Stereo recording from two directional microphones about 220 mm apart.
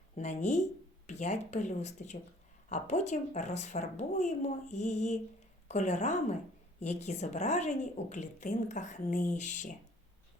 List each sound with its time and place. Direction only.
0.2 s speech: 30° left (ahead or behind)